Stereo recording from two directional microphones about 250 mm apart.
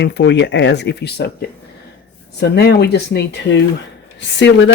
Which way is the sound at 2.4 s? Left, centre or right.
Left.